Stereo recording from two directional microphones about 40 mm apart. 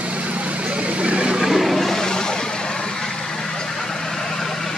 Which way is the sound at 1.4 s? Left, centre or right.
Centre.